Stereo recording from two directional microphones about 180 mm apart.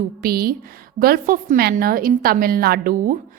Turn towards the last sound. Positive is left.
turn(degrees=-50)  # may be behind; listen again after turning